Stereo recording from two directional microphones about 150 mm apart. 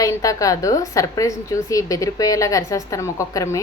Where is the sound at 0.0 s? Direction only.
20° left (ahead or behind).